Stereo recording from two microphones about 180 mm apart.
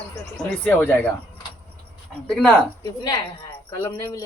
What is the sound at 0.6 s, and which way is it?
Speech, 10° left (ahead or behind).